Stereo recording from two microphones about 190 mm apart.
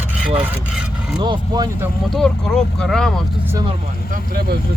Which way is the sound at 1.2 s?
25° right (ahead or behind).